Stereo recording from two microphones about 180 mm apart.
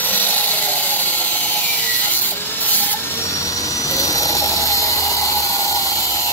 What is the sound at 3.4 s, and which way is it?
Helicopter, 20° left (ahead or behind).